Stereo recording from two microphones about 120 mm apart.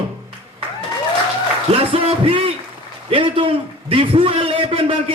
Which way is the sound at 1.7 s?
55° right (ahead or behind).